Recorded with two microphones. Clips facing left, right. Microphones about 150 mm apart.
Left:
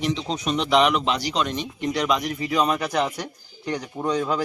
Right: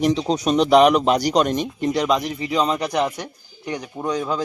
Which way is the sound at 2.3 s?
25° right (ahead or behind).